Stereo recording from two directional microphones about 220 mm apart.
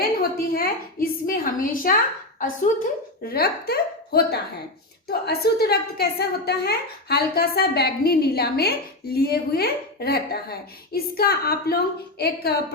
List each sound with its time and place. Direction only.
0.0 s a woman's voice: 40° left (ahead or behind)